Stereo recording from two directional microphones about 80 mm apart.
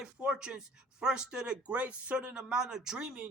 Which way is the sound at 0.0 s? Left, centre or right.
Centre.